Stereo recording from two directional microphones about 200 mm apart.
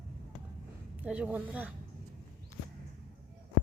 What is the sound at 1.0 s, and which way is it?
Speech, 5° right (ahead or behind).